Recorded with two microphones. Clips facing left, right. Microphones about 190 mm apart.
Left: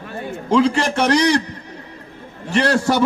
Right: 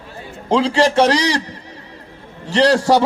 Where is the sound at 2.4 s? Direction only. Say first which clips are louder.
Right 3 dB; 55° left (ahead or behind).